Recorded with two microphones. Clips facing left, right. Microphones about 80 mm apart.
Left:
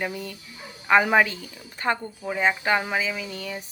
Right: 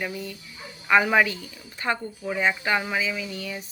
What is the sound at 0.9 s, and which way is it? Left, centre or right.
Speech, left.